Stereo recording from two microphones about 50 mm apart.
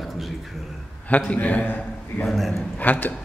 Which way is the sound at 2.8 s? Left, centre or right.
Left.